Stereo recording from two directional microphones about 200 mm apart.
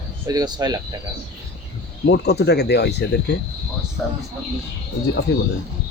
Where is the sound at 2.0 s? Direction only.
55° left (ahead or behind).